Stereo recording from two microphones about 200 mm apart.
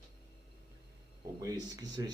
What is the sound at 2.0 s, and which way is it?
Speech, 15° right (ahead or behind).